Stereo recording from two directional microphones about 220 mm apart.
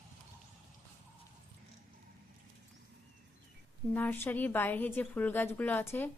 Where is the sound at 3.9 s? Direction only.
10° left (ahead or behind).